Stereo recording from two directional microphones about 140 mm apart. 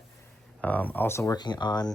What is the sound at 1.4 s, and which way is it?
Speech, 30° left (ahead or behind).